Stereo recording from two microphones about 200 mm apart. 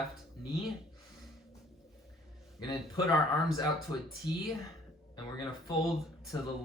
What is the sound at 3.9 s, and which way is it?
Speech, 20° left (ahead or behind).